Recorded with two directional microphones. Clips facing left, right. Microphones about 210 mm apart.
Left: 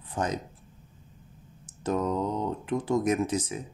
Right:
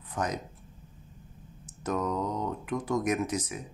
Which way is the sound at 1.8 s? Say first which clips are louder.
Left 3 dB; 30° left (ahead or behind).